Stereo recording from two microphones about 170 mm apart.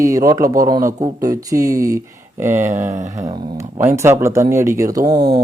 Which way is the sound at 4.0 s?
15° right (ahead or behind).